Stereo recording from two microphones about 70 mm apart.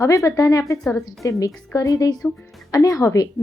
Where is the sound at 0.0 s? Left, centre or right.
Left.